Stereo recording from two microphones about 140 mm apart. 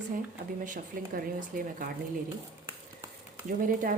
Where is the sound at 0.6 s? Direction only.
70° right (ahead or behind); by 1.9 s 90° right.